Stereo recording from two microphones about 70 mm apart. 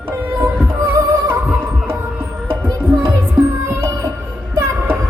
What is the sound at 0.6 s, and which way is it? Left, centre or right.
Music, right.